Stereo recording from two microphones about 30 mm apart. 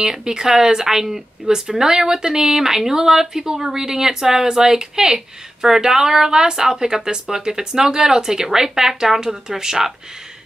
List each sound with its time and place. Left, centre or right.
0.0 s speech: right